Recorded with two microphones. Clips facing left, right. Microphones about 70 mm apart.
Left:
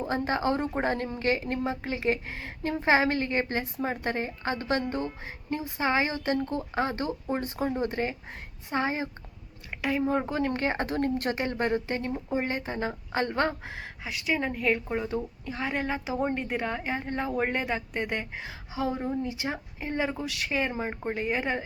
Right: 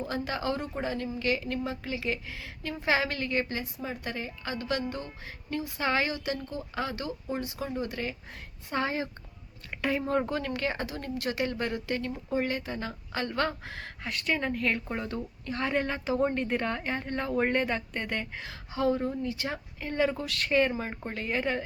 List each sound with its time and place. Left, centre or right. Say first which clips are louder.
0.0 s speech: left 4 dB; left
1.2 s speech: left 2 dB; left
3.6 s speech: left 5 dB; left
6.1 s speech: left 6 dB; left
8.7 s speech: left 2 dB; left
10.5 s speech: left 4 dB; left
14.0 s a woman's voice: left 1 dB; centre